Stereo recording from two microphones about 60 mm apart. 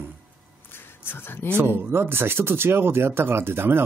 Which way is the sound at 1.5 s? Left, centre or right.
Right.